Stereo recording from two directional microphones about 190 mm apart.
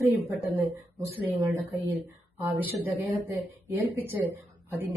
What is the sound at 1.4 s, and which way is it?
Speech, 15° right (ahead or behind).